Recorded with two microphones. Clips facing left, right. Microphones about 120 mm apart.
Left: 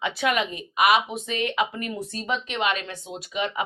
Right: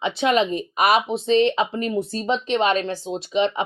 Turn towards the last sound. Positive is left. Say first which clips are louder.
# right 7 dB
turn(degrees=-25)  # may be behind; listen again after turning